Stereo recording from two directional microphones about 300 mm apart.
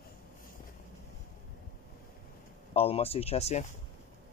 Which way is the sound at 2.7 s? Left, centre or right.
Centre.